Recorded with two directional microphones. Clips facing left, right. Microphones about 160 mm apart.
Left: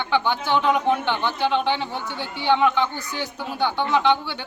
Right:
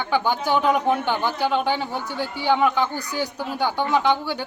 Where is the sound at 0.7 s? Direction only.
5° right (ahead or behind).